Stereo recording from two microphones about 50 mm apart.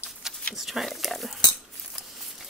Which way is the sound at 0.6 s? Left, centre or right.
Centre.